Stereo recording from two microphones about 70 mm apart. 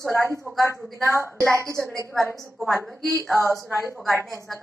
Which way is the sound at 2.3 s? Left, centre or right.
Centre.